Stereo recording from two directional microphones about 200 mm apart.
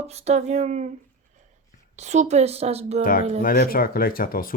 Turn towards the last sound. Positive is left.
turn(degrees=45)  # may be behind; listen again after turning